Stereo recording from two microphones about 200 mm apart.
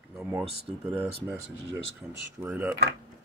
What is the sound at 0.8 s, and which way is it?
Speech, 10° right (ahead or behind).